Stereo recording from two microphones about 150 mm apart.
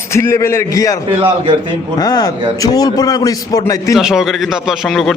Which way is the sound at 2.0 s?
25° left (ahead or behind).